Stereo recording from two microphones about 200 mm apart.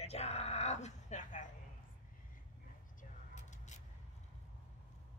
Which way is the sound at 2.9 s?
40° left (ahead or behind).